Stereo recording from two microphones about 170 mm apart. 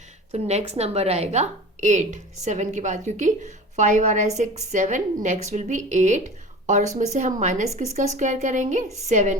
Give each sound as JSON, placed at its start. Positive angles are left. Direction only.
{"t": 0.3, "sound": "a woman's voice", "side_deg": -40}